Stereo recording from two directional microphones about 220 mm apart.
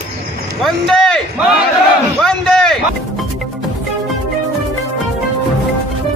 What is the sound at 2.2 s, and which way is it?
Speech, centre (ahead or behind).